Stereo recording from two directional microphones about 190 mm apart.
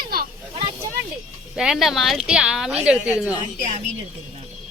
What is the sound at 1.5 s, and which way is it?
Speech, centre (ahead or behind).